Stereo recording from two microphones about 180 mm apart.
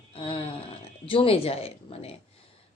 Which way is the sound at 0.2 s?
30° left (ahead or behind).